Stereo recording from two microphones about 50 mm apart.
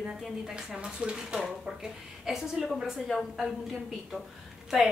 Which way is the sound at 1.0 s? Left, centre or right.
Centre.